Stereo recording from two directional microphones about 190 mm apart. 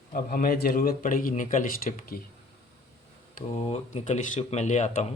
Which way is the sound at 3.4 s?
35° left (ahead or behind).